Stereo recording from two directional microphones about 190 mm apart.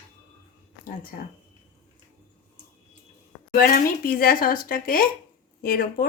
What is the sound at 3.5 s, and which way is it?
A woman's voice, 50° left (ahead or behind).